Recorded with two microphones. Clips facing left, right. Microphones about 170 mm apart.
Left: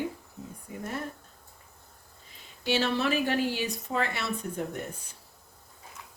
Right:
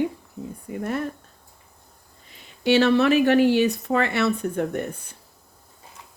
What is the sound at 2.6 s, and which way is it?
Speech, 70° right (ahead or behind).